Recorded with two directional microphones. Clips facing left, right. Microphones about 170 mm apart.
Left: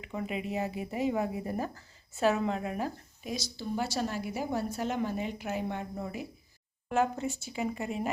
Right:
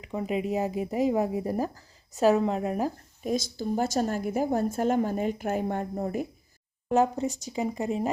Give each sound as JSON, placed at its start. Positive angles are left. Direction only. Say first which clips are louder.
{"t": 0.2, "sound": "speech", "louder": "right 6 dB", "side_deg": -40}
{"t": 2.3, "sound": "speech", "louder": "right 6 dB", "side_deg": 0}
{"t": 2.6, "sound": "speech", "louder": "right 6 dB", "side_deg": -40}